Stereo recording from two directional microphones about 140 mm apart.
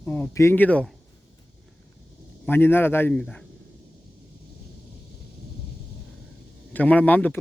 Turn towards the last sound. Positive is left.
turn(degrees=10)  # may be behind; listen again after turning